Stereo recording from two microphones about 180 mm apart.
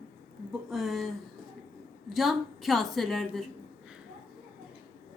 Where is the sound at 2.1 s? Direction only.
Centre (ahead or behind).